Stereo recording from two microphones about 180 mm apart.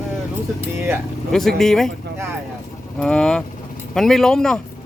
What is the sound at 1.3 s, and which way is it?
Speech, centre (ahead or behind).